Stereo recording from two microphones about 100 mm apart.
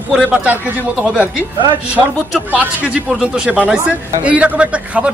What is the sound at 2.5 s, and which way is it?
Speech, 15° right (ahead or behind).